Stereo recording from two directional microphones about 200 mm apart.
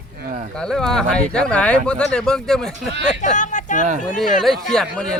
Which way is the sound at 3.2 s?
40° left (ahead or behind).